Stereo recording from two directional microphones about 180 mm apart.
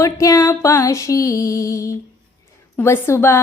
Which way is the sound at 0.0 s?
15° left (ahead or behind).